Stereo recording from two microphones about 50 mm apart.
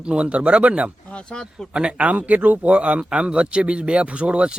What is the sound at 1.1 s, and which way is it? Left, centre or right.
Speech, centre.